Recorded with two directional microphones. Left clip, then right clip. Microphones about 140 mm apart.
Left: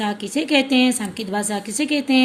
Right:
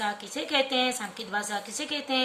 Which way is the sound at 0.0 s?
20° left (ahead or behind).